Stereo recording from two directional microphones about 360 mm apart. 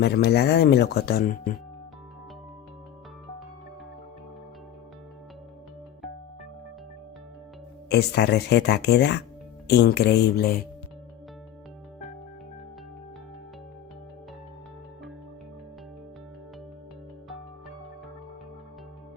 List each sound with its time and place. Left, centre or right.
0.0 s speech: left
7.9 s speech: left